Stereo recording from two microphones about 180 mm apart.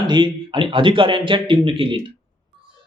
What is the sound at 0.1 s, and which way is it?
A man's voice, 25° right (ahead or behind).